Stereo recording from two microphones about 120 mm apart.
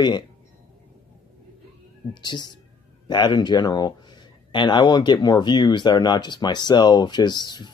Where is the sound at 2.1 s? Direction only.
40° left (ahead or behind).